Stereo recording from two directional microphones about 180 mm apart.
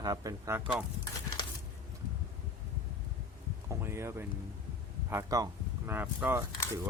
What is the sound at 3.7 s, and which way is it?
Speech, 15° right (ahead or behind).